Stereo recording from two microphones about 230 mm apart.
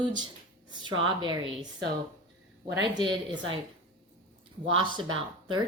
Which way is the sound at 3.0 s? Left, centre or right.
Centre.